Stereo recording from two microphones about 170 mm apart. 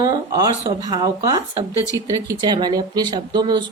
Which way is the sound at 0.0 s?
20° right (ahead or behind).